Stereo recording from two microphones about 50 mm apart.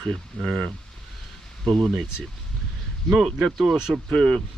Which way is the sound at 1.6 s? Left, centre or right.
Centre.